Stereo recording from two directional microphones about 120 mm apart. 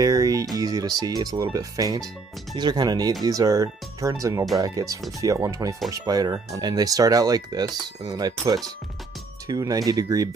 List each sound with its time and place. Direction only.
0.0 s music: 30° right (ahead or behind)
0.6 s speech: 30° right (ahead or behind)